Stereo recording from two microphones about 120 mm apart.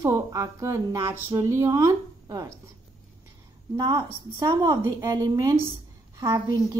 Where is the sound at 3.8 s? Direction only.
30° right (ahead or behind).